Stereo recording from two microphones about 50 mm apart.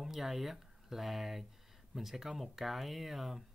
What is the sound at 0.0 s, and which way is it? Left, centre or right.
Speech, centre.